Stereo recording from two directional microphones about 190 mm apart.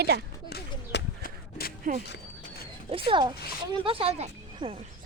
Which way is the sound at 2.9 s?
25° right (ahead or behind).